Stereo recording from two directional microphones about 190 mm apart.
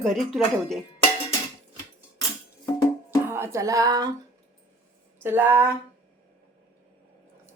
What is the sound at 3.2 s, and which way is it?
Speech, 15° right (ahead or behind).